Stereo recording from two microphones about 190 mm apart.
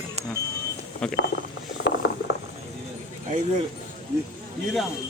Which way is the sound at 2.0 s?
65° left (ahead or behind).